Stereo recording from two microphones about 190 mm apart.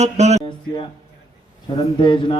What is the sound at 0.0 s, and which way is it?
Speech, 35° right (ahead or behind).